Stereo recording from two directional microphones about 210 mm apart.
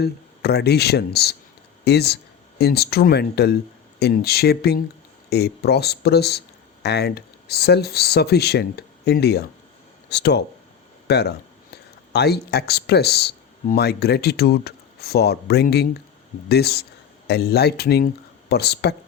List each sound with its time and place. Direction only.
0.0 s speech: 50° left (ahead or behind)